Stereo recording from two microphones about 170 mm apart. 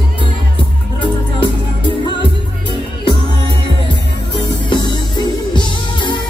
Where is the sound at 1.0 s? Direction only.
30° left (ahead or behind).